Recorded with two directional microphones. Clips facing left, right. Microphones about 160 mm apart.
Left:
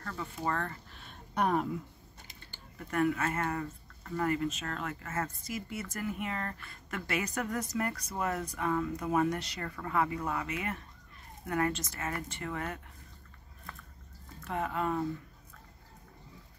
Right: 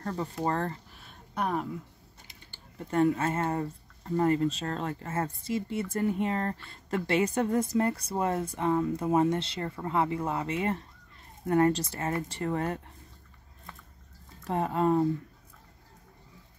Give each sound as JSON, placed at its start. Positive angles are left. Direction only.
{"t": 0.0, "sound": "speech", "side_deg": -35}
{"t": 0.9, "sound": "a sound", "side_deg": -5}
{"t": 2.8, "sound": "speech", "side_deg": -30}
{"t": 14.4, "sound": "speech", "side_deg": -35}